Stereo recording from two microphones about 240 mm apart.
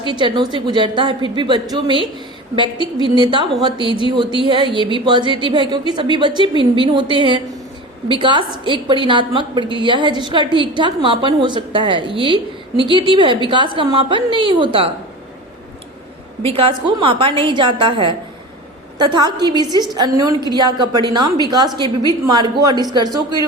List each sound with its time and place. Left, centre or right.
0.0 s a woman's voice: centre
16.5 s a woman's voice: right